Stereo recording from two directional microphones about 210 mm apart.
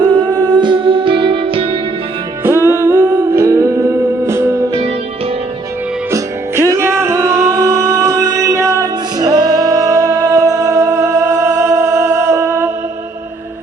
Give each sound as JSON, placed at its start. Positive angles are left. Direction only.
{"t": 0.0, "sound": "music", "side_deg": -20}
{"t": 2.4, "sound": "humming", "side_deg": -10}
{"t": 6.1, "sound": "music", "side_deg": -15}